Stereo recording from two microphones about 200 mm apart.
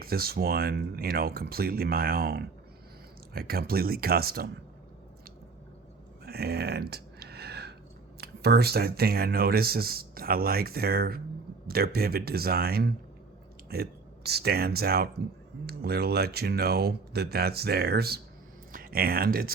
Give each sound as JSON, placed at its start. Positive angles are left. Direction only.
{"t": 0.0, "sound": "speech", "side_deg": -50}
{"t": 6.2, "sound": "a sound", "side_deg": -50}
{"t": 8.2, "sound": "speech", "side_deg": -50}